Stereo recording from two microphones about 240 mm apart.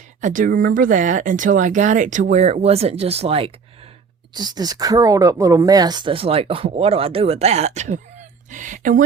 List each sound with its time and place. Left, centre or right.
0.2 s speech: right